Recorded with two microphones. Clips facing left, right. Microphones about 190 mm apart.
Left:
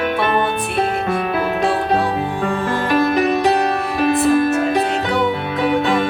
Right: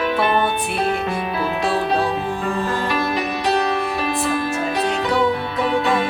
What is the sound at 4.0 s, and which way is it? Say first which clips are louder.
Music: left 7 dB; 50° left (ahead or behind).